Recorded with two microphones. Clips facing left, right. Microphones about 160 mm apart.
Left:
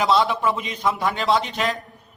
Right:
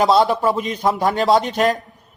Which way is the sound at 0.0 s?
40° right (ahead or behind).